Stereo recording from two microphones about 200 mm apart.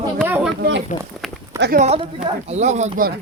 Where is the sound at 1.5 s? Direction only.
55° right (ahead or behind).